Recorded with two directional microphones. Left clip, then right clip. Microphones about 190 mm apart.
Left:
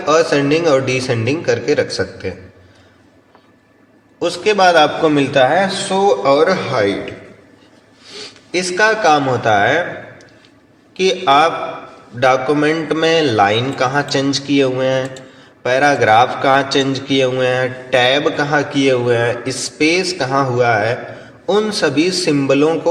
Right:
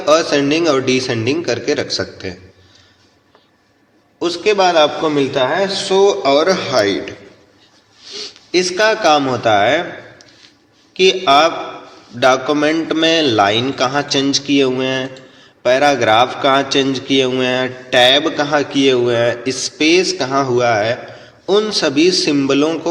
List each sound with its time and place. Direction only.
0.0 s a man's voice: 30° right (ahead or behind)
4.2 s a man's voice: 25° right (ahead or behind)
5.9 s a man's voice: 30° right (ahead or behind)
8.1 s a man's voice: 30° right (ahead or behind)
10.9 s a man's voice: 30° right (ahead or behind)